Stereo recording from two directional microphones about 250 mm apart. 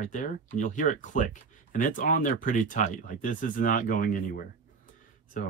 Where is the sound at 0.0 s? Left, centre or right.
Left.